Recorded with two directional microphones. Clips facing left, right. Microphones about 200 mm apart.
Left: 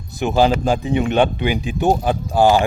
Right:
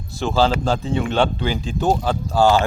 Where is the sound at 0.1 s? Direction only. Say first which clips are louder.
Left 3 dB; 15° left (ahead or behind).